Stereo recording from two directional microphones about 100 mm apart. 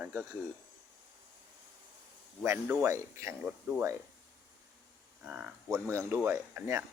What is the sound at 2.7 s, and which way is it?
Speech, 30° right (ahead or behind).